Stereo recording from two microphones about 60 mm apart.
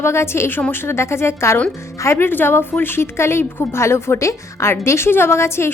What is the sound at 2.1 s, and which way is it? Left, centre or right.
A woman's voice, left.